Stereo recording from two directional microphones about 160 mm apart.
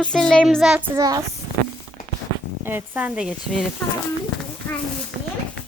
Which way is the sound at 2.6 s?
10° right (ahead or behind).